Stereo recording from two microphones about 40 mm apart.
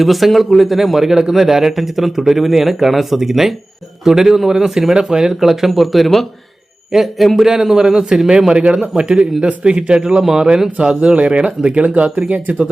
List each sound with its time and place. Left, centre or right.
0.0 s a man's voice: centre; by 12.6 s right